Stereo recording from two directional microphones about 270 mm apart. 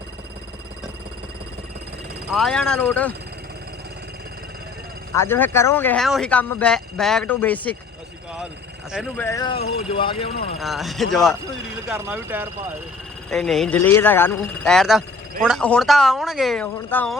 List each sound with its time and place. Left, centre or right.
2.3 s speech: centre
5.1 s speech: centre
8.9 s speech: centre
9.2 s speech: centre
10.6 s speech: centre